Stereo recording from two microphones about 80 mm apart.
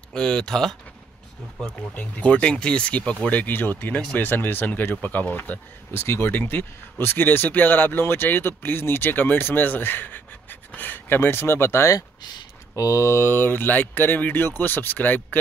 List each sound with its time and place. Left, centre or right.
0.1 s speech: centre
2.0 s speech: centre; by 11.9 s left
11.9 s speech: left
12.7 s speech: left